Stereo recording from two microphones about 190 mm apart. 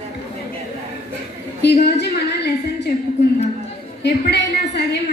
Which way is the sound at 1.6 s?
60° left (ahead or behind).